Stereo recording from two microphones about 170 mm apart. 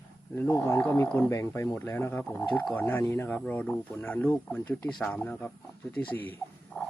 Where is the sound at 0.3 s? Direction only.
15° left (ahead or behind).